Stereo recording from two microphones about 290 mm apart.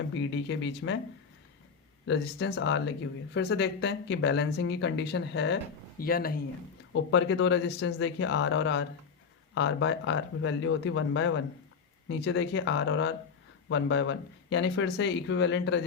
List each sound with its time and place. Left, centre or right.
0.1 s speech: left
2.0 s speech: left